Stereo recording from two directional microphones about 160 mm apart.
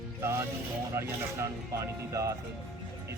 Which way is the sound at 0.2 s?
15° right (ahead or behind).